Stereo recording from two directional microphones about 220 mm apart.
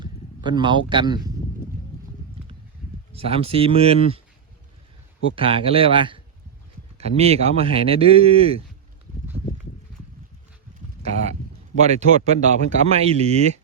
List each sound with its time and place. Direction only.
0.0 s a man's voice: 20° right (ahead or behind)
3.1 s speech: 25° right (ahead or behind)
5.3 s speech: 25° right (ahead or behind)
11.8 s speech: 30° right (ahead or behind)